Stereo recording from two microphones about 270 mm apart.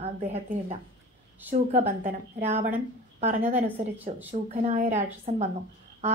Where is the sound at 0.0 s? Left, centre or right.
Right.